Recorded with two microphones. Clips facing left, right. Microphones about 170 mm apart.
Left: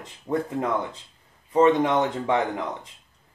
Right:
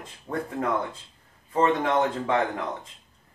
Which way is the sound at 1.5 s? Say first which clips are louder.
Left 4 dB; 15° left (ahead or behind).